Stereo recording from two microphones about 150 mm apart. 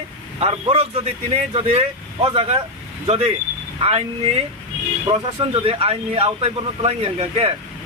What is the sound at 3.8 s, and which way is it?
Speech, 40° right (ahead or behind).